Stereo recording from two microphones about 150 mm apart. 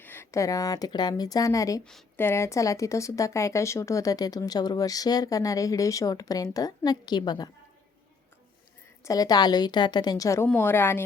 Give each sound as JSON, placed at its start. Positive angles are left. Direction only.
{"t": 0.0, "sound": "speech", "side_deg": 15}
{"t": 1.8, "sound": "a woman's voice", "side_deg": 5}
{"t": 2.1, "sound": "speech", "side_deg": 15}
{"t": 9.0, "sound": "speech", "side_deg": 25}